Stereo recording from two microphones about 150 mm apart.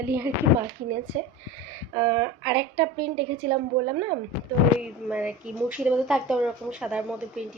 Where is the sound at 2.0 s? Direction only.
20° right (ahead or behind).